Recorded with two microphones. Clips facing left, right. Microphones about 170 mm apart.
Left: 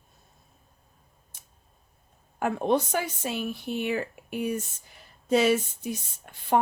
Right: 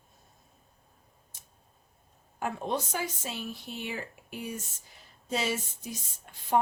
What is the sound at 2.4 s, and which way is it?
Speech, 65° left (ahead or behind).